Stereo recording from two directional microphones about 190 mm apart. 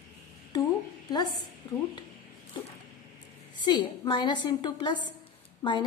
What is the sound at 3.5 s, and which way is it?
A woman's voice, 25° left (ahead or behind).